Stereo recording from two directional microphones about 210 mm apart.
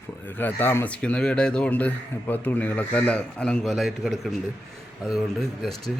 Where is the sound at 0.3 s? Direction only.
10° left (ahead or behind).